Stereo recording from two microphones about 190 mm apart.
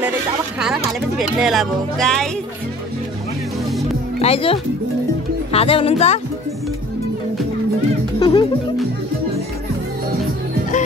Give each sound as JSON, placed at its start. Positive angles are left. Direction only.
{"t": 0.6, "sound": "speech", "side_deg": 0}
{"t": 4.2, "sound": "speech", "side_deg": 30}
{"t": 8.2, "sound": "speech", "side_deg": 25}